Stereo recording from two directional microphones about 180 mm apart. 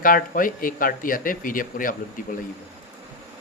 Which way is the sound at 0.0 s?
50° left (ahead or behind).